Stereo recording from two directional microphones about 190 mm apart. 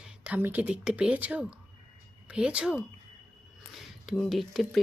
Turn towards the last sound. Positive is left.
turn(degrees=0)  # may be behind; listen again after turning